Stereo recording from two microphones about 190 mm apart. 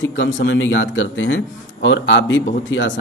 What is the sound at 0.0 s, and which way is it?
A man's voice, 80° left.